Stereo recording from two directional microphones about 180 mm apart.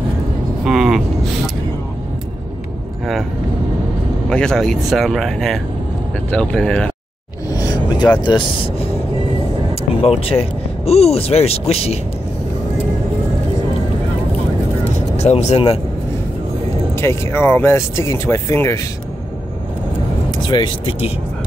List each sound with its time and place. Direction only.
0.7 s vehicle: centre (ahead or behind)
4.3 s speech: 5° left (ahead or behind)
7.5 s a sound: 20° left (ahead or behind)
8.2 s speech: 25° left (ahead or behind)
10.0 s speech: 35° left (ahead or behind)
15.1 s speech: 35° left (ahead or behind)
16.9 s speech: 15° left (ahead or behind)
20.2 s speech: 25° left (ahead or behind)